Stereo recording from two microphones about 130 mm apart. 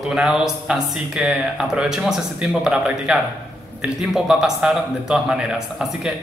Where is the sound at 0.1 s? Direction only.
5° right (ahead or behind).